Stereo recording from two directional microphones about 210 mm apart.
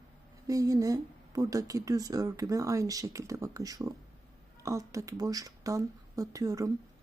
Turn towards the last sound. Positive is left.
turn(degrees=-15)  # may be behind; listen again after turning